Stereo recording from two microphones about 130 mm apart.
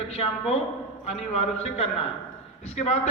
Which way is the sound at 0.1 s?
50° left (ahead or behind).